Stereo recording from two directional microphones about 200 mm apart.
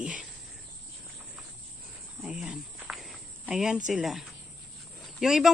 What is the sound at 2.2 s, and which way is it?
Cricket, centre (ahead or behind).